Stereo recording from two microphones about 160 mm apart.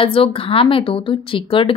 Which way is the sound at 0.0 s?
35° left (ahead or behind).